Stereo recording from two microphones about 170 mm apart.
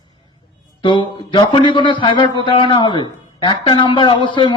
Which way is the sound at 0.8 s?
30° left (ahead or behind).